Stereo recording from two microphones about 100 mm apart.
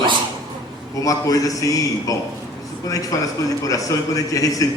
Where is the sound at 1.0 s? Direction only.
35° left (ahead or behind).